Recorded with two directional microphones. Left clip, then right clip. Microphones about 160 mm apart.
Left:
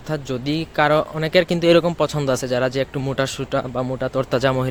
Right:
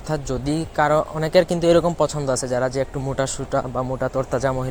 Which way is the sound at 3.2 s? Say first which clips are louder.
Even; 20° left (ahead or behind).